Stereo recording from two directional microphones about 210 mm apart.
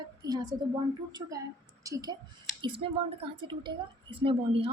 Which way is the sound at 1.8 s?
15° right (ahead or behind).